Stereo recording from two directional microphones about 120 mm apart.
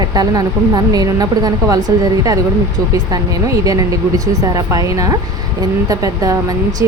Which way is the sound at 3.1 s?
30° right (ahead or behind).